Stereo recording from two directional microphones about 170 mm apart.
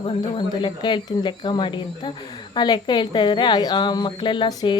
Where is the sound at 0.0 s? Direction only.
30° left (ahead or behind).